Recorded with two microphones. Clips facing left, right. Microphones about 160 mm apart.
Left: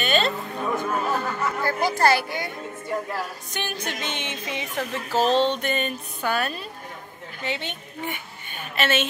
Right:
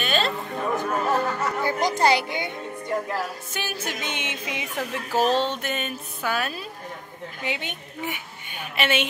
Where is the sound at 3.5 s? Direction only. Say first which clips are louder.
Left 2 dB; 5° right (ahead or behind).